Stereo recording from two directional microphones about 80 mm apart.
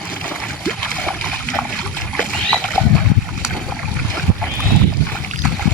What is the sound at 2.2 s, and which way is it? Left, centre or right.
Boat, centre.